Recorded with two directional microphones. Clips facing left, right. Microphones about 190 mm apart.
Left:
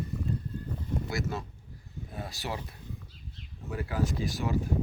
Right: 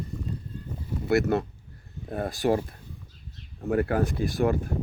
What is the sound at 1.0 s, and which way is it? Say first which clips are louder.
Speech: right 11 dB; 65° right (ahead or behind).